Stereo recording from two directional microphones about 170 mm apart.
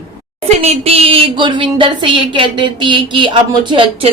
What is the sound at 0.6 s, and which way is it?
A woman's voice, 40° right (ahead or behind).